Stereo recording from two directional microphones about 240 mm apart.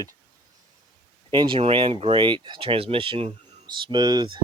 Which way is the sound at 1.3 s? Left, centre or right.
Centre.